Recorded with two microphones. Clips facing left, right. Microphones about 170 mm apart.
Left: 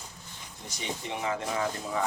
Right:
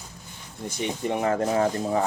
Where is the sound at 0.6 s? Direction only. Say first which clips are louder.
Right 9 dB; 50° right (ahead or behind).